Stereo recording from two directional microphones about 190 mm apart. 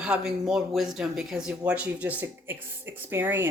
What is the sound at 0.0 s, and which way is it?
Speech, 5° right (ahead or behind).